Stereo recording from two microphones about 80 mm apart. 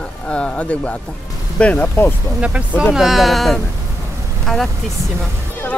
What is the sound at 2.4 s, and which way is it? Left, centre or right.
Speech, centre.